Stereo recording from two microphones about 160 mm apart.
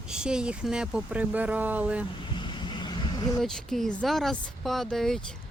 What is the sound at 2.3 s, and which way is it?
Vehicle, 30° left (ahead or behind).